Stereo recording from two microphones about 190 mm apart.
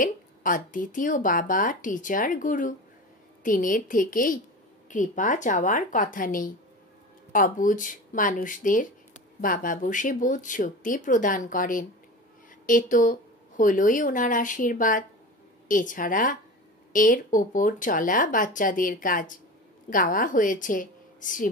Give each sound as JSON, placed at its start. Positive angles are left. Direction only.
{"t": 0.0, "sound": "speech", "side_deg": 45}